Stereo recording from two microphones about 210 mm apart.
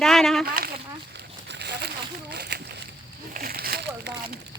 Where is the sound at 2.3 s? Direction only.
50° right (ahead or behind).